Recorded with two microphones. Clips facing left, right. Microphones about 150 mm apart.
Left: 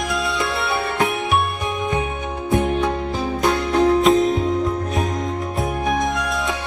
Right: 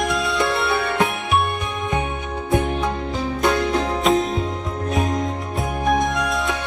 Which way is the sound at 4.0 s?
Centre (ahead or behind).